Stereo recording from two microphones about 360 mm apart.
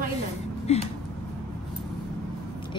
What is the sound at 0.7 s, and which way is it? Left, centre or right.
Speech, centre.